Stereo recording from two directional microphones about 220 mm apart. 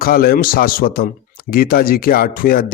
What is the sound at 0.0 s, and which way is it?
Speech, 45° left (ahead or behind).